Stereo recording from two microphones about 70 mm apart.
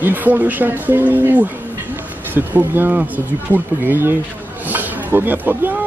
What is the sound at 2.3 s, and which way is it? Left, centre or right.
Speech, right.